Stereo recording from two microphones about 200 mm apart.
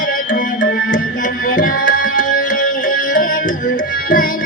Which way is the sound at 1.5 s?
45° left (ahead or behind).